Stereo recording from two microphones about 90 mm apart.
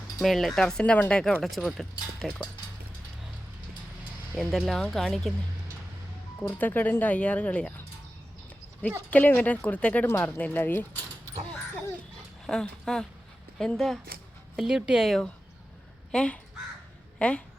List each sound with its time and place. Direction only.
0.2 s speech: centre (ahead or behind)
1.2 s speech: 5° left (ahead or behind)
4.4 s speech: centre (ahead or behind)
6.4 s speech: 20° left (ahead or behind)
9.0 s speech: 15° left (ahead or behind)
12.5 s speech: 5° left (ahead or behind)
14.5 s speech: 5° right (ahead or behind)
16.1 s speech: 10° left (ahead or behind)